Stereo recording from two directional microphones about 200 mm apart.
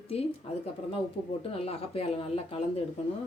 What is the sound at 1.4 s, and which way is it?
Speech, 30° left (ahead or behind).